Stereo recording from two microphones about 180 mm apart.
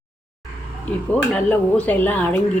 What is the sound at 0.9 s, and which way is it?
Speech, 5° left (ahead or behind).